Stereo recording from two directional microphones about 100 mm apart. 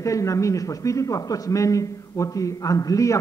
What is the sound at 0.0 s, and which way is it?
Speech, 30° left (ahead or behind).